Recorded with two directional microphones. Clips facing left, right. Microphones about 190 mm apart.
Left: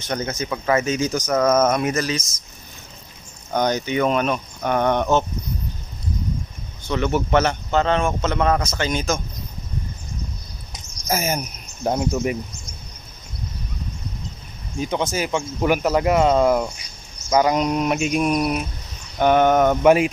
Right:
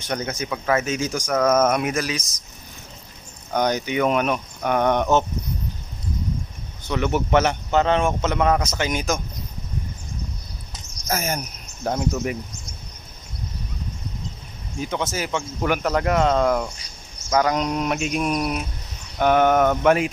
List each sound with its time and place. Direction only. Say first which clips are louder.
0.1 s a man's voice: left 1 dB; 10° right (ahead or behind)
3.5 s a man's voice: left 1 dB; 10° right (ahead or behind)
6.9 s a man's voice: left 1 dB; 15° right (ahead or behind)
10.7 s cricket: left 2 dB; 10° left (ahead or behind)
11.8 s speech: left 3 dB; 20° left (ahead or behind)
14.8 s speech: left 3 dB; 20° left (ahead or behind)
17.3 s a sound: left 3 dB; 10° left (ahead or behind)
19.7 s speech: left 3 dB; 10° left (ahead or behind)